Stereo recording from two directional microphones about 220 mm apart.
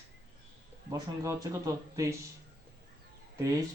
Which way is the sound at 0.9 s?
15° right (ahead or behind).